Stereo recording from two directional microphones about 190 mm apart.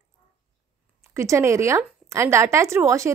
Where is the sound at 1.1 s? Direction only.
15° right (ahead or behind).